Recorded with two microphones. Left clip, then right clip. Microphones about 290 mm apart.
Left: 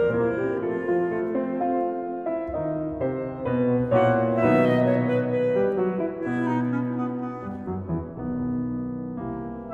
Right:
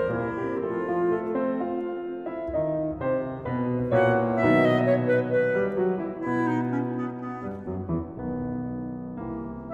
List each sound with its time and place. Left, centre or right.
0.7 s music: centre
3.9 s music: centre
6.2 s clarinet: centre